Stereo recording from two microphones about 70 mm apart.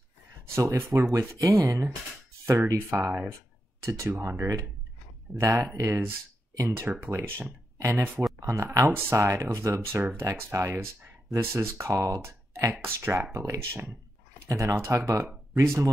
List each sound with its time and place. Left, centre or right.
0.7 s speech: right
1.1 s speech: right